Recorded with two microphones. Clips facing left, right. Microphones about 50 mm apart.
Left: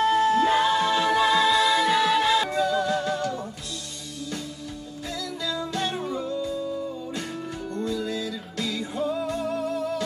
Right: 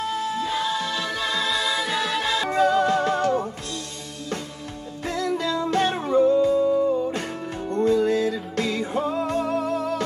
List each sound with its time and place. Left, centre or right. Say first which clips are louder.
0.0 s music: left 6 dB; left; by 2.5 s centre
2.5 s music: right 4 dB; right
5.0 s music: right 7 dB; right